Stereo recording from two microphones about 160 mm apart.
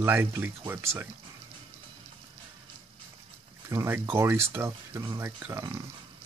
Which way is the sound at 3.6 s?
15° right (ahead or behind).